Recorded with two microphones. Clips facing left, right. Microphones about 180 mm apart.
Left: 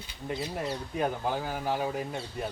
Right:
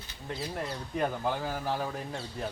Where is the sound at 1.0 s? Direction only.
15° left (ahead or behind).